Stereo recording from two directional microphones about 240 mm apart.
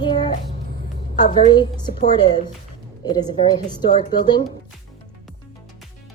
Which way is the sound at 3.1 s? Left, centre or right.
Centre.